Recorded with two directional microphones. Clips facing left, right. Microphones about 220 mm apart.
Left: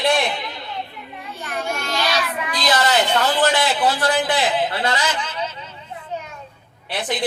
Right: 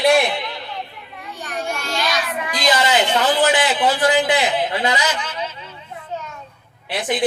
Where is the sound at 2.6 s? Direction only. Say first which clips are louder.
Right 1 dB; 10° right (ahead or behind).